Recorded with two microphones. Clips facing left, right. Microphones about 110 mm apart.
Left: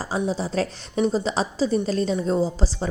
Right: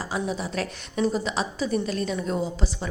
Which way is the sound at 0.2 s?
30° left (ahead or behind).